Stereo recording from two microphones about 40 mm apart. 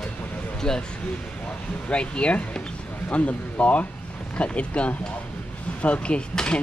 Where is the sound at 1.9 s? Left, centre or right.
Left.